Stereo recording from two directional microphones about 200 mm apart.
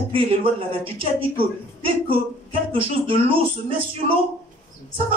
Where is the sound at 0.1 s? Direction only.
25° right (ahead or behind).